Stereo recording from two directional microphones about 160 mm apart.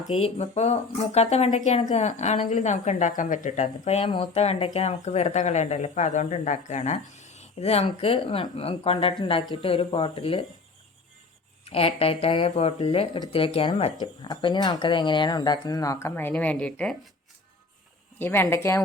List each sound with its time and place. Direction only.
0.2 s speech: 40° left (ahead or behind)
11.6 s speech: 40° left (ahead or behind); by 17.0 s 5° left (ahead or behind)
18.2 s speech: 15° left (ahead or behind)